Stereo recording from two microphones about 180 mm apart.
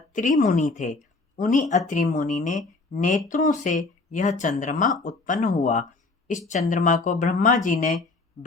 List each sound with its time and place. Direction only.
0.1 s speech: 45° left (ahead or behind)